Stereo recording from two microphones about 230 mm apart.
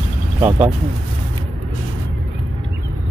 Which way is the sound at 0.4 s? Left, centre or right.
Centre.